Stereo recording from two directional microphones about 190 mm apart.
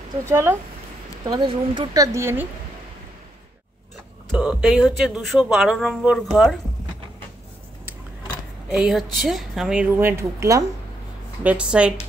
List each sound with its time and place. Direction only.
0.3 s speech: 15° right (ahead or behind)
4.3 s speech: 5° right (ahead or behind)
8.7 s speech: centre (ahead or behind)